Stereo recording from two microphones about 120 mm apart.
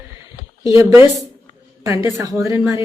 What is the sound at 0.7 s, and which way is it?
Speech, 25° right (ahead or behind).